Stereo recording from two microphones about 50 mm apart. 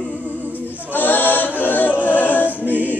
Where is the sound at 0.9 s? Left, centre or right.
Left.